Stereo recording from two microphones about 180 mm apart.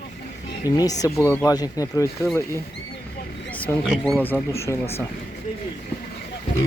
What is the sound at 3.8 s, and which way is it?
Speech, centre (ahead or behind).